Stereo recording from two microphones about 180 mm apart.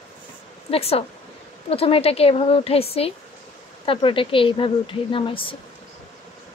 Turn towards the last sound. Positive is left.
turn(degrees=30)  # may be behind; listen again after turning